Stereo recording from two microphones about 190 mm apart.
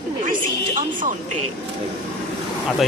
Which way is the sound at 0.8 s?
45° right (ahead or behind).